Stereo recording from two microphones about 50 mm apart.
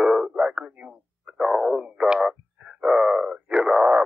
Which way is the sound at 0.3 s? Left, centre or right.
Right.